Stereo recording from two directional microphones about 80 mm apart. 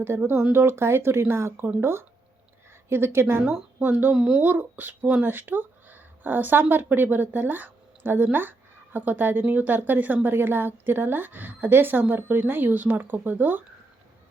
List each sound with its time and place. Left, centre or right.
0.1 s speech: right
4.1 s speech: centre